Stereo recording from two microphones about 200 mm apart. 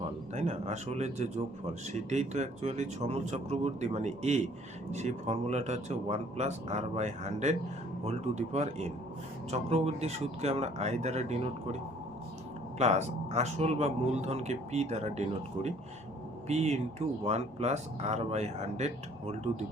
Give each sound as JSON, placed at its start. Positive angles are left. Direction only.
{"t": 0.3, "sound": "speech", "side_deg": -35}
{"t": 12.8, "sound": "speech", "side_deg": -35}